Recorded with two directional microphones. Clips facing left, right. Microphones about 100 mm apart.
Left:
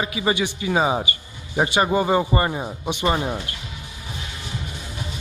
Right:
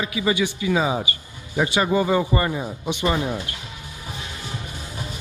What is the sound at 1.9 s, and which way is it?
A man's voice, 35° left (ahead or behind).